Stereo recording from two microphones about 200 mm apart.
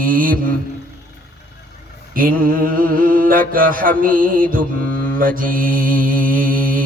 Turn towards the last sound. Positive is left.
turn(degrees=-45)  # may be behind; listen again after turning